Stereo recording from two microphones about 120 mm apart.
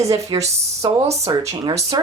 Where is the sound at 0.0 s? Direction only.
25° right (ahead or behind).